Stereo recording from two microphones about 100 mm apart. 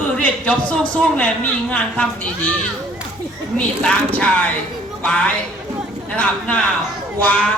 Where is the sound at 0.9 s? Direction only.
15° left (ahead or behind).